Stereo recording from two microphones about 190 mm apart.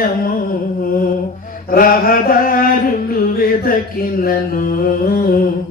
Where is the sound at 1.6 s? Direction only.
50° left (ahead or behind).